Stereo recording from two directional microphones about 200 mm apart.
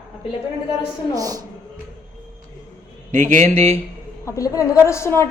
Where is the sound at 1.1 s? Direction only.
15° right (ahead or behind).